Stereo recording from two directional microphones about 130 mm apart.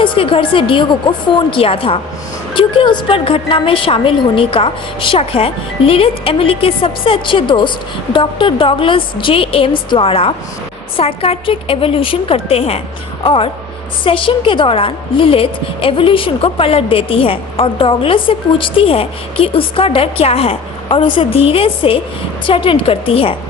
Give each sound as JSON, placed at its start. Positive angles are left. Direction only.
{"t": 0.0, "sound": "a woman's voice", "side_deg": 40}